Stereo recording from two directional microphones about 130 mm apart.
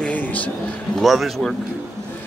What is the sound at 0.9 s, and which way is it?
Speech, centre (ahead or behind).